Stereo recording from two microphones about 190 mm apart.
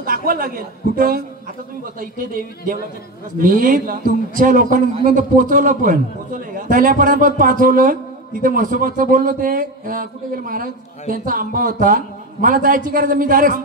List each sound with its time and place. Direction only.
0.0 s a man's voice: 50° right (ahead or behind)